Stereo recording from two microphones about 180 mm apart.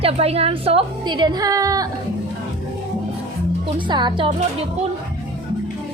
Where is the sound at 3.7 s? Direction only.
25° right (ahead or behind).